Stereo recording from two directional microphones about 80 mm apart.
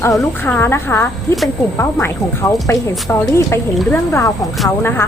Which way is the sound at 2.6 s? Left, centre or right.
Left.